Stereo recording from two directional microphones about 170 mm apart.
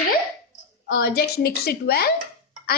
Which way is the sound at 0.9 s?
65° left (ahead or behind).